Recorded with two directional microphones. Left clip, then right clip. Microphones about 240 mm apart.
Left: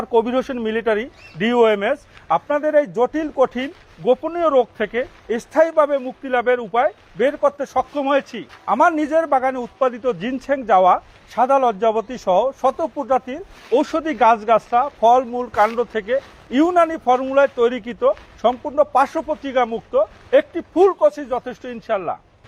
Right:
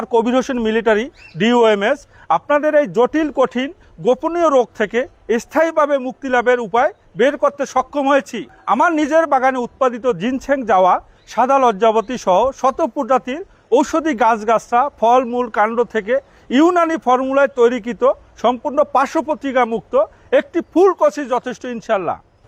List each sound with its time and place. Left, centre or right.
0.0 s speech: right